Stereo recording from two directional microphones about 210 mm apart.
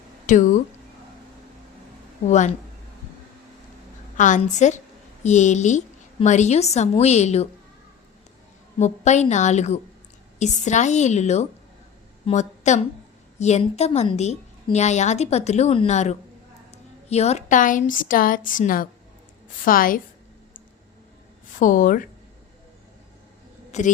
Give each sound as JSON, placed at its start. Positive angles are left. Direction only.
{"t": 0.3, "sound": "a woman's voice", "side_deg": 35}
{"t": 2.2, "sound": "a woman's voice", "side_deg": 35}
{"t": 4.2, "sound": "a woman's voice", "side_deg": 35}
{"t": 8.8, "sound": "a woman's voice", "side_deg": 35}
{"t": 21.6, "sound": "a woman's voice", "side_deg": 40}
{"t": 23.7, "sound": "a woman's voice", "side_deg": 35}